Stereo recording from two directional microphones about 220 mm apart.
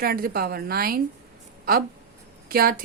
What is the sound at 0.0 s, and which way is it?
A woman's voice, 45° right (ahead or behind).